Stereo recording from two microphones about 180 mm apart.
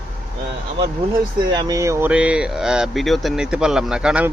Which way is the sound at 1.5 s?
20° right (ahead or behind).